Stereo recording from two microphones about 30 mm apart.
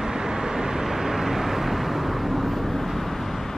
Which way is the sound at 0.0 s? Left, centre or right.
Centre.